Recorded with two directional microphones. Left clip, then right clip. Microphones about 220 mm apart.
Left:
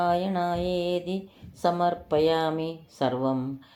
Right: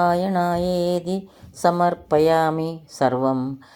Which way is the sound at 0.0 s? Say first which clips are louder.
Right 6 dB; 35° right (ahead or behind).